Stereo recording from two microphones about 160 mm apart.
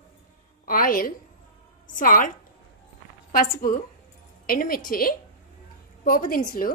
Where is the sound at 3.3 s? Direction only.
60° left (ahead or behind).